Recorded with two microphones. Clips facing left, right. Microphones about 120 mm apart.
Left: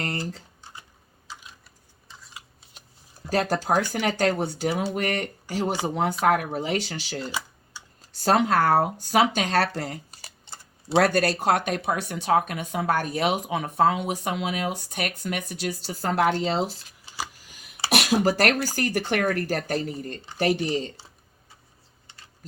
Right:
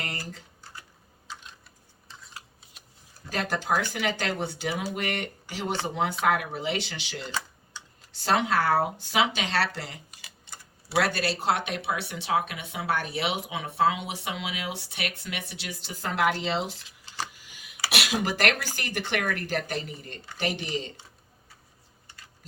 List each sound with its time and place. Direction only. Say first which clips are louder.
0.0 s typing: left 6 dB; 35° left (ahead or behind)
0.6 s computer keyboard: left 1 dB; 20° left (ahead or behind)
1.3 s typing: even; 5° left (ahead or behind)
2.0 s a sound: even; centre (ahead or behind)
3.2 s speech: left 5 dB; 40° left (ahead or behind)
7.3 s computer keyboard: left 2 dB; 10° left (ahead or behind)
8.1 s speech: left 4 dB; 40° left (ahead or behind)
11.0 s speech: left 5 dB; 45° left (ahead or behind)
17.4 s a sound: even; 45° left (ahead or behind)
17.9 s speech: left 7 dB; 45° left (ahead or behind)